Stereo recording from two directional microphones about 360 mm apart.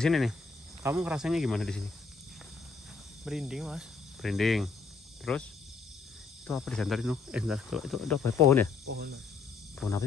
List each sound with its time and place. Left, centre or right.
0.0 s speech: centre
3.3 s speech: centre
8.8 s cricket: right
9.8 s speech: centre